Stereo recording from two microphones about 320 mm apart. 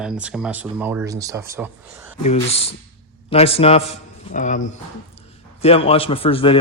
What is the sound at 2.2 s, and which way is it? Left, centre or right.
A man's voice, centre.